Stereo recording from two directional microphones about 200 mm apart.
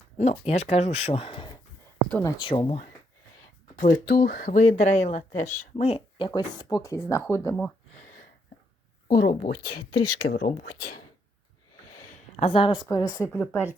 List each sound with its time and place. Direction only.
0.2 s speech: 35° left (ahead or behind)
2.0 s speech: 10° left (ahead or behind)
2.4 s speech: 25° left (ahead or behind)
3.8 s speech: 45° left (ahead or behind); by 7.7 s 10° left (ahead or behind)
9.0 s speech: 50° left (ahead or behind)
12.4 s a woman's voice: 30° left (ahead or behind); by 13.7 s 10° left (ahead or behind)